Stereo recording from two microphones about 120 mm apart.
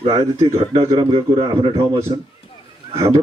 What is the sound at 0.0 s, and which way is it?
Speech, 35° right (ahead or behind).